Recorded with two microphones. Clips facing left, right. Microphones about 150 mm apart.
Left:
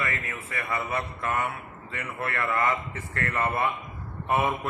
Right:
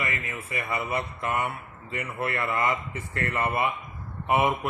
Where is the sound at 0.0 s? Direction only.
15° right (ahead or behind).